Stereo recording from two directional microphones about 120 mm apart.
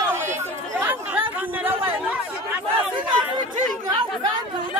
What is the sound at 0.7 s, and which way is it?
Chatter, 15° right (ahead or behind).